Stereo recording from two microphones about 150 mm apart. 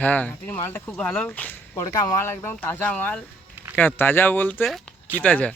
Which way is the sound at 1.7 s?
25° left (ahead or behind).